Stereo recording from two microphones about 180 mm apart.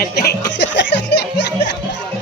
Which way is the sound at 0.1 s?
65° left (ahead or behind).